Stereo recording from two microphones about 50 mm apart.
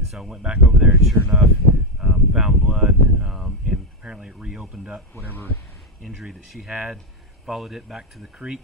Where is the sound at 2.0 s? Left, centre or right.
Centre.